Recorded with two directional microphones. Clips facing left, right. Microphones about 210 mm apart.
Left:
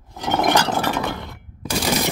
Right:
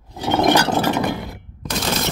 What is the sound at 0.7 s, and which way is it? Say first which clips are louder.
Chink: right 3 dB; 25° right (ahead or behind).